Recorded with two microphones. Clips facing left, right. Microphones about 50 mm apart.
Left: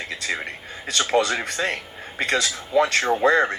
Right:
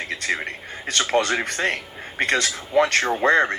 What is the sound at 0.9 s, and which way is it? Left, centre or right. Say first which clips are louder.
Speech: even; right.